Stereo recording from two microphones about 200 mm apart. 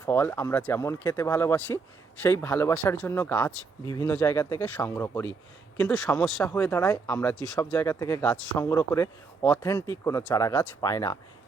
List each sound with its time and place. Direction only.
0.0 s speech: 10° left (ahead or behind)